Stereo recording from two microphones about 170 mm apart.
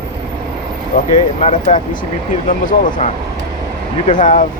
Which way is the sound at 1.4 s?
40° left (ahead or behind).